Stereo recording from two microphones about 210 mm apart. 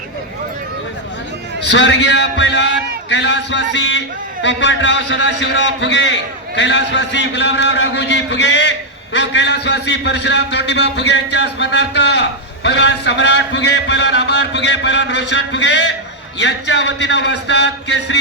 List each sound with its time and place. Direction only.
1.6 s a man's voice: 55° left (ahead or behind)